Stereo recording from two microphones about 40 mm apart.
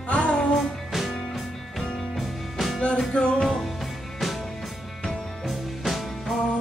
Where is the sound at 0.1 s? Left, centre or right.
Left.